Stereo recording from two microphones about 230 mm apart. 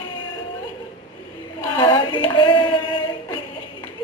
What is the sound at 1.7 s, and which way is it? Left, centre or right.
Hands, centre.